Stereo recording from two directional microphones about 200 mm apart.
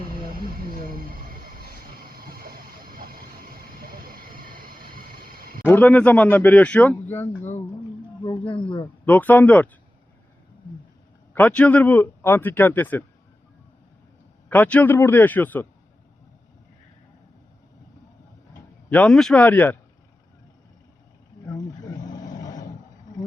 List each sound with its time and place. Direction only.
0.3 s a sound: 45° right (ahead or behind)
5.6 s speech: 10° left (ahead or behind)
8.2 s speech: 25° left (ahead or behind)
9.0 s speech: 10° left (ahead or behind)
11.3 s speech: 5° left (ahead or behind)
14.5 s speech: 10° left (ahead or behind)
18.9 s speech: 5° left (ahead or behind)
21.4 s wild animals: 20° left (ahead or behind)